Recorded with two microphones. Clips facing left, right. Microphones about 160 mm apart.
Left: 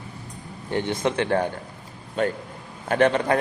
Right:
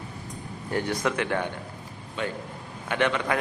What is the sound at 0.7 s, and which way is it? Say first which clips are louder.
Speech: left 3 dB; 25° left (ahead or behind).